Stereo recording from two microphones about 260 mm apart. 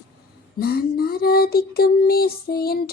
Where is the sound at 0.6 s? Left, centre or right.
Left.